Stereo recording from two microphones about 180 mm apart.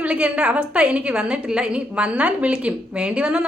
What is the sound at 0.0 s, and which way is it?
A woman's voice, 5° right (ahead or behind).